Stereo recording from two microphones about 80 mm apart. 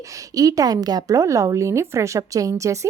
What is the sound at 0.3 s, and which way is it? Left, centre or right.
A woman's voice, right.